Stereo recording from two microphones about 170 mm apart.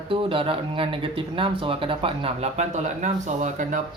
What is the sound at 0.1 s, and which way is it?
Speech, 30° right (ahead or behind).